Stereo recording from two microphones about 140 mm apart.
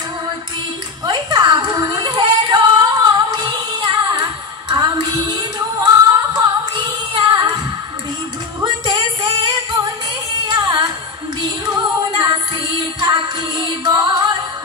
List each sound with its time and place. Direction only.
1.0 s music: 30° right (ahead or behind)
8.6 s music: 30° right (ahead or behind)
10.4 s singing: 30° right (ahead or behind)
11.7 s music: 30° right (ahead or behind)